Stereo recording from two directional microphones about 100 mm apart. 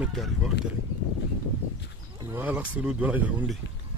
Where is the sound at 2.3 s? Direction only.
15° right (ahead or behind).